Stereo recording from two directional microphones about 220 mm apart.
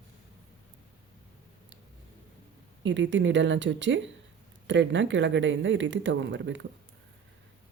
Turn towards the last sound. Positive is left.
turn(degrees=-55)  # may be behind; listen again after turning